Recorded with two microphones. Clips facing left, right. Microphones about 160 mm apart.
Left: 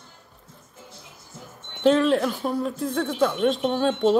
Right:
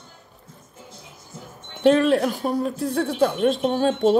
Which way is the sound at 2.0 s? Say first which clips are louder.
Right 2 dB; 45° right (ahead or behind).